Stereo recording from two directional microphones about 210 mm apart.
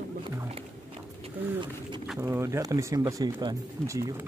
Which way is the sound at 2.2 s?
10° right (ahead or behind).